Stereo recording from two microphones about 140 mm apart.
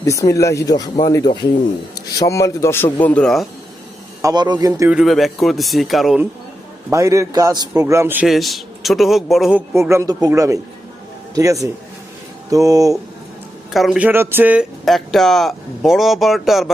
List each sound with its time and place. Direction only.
0.0 s a man's voice: 20° left (ahead or behind); by 3.4 s 5° left (ahead or behind)
4.2 s a man's voice: 30° right (ahead or behind)
4.9 s speech: centre (ahead or behind)
6.9 s a man's voice: 20° right (ahead or behind)
8.3 s speech: centre (ahead or behind)
9.9 s a man's voice: 25° right (ahead or behind)
13.7 s speech: centre (ahead or behind)
14.1 s a sound: 15° right (ahead or behind)
14.8 s speech: centre (ahead or behind)